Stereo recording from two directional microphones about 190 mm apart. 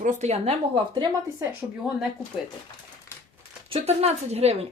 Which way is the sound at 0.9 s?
20° right (ahead or behind).